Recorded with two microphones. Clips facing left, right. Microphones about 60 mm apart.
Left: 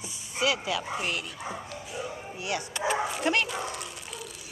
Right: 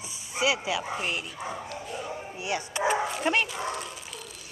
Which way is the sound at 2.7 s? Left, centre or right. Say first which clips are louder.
Right 3 dB; centre.